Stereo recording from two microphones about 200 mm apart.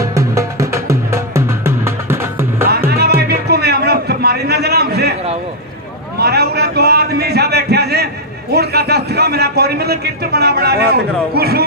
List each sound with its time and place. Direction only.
0.0 s music: 15° right (ahead or behind)
2.9 s music: 50° right (ahead or behind)
6.1 s a sound: 50° right (ahead or behind)
8.5 s a man's voice: 50° right (ahead or behind)